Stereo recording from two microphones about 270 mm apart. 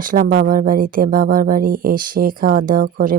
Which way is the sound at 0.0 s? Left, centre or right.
Right.